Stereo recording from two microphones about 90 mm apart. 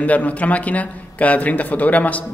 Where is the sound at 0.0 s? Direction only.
15° left (ahead or behind).